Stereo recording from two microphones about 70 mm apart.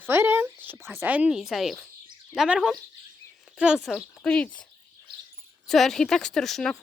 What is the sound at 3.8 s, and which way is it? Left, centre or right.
Speech, centre.